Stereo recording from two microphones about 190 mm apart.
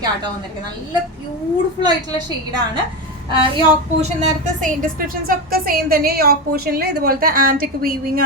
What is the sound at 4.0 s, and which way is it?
A woman's voice, 35° right (ahead or behind).